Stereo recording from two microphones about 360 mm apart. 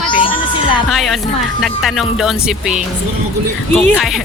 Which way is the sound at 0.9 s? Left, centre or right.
Centre.